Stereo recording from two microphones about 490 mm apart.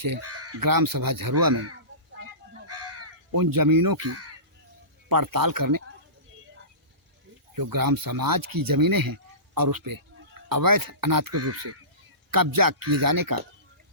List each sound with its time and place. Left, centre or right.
0.2 s crow: right
0.6 s speech: right
2.6 s crow: right
3.3 s speech: right
4.0 s speech: right
5.0 s speech: right
7.5 s speech: right
11.3 s speech: right
12.3 s speech: right